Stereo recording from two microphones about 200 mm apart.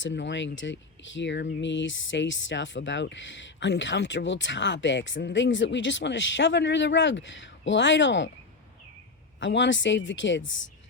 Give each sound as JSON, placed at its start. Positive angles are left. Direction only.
{"t": 0.0, "sound": "speech", "side_deg": 65}
{"t": 9.4, "sound": "speech", "side_deg": 65}